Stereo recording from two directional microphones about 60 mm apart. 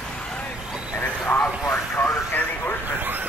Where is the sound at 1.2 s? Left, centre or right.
Left.